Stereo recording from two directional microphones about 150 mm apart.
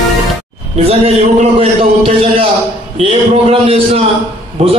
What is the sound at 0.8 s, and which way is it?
A man's voice, 40° right (ahead or behind).